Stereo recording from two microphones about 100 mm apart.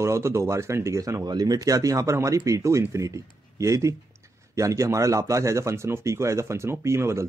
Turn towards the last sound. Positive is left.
turn(degrees=-30)  # may be behind; listen again after turning